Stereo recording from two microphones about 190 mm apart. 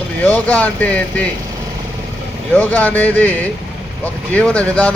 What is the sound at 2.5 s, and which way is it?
Speech, 10° left (ahead or behind).